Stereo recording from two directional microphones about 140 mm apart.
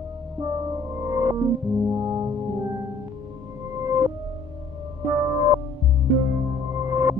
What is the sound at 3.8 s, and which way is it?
Music, 20° right (ahead or behind).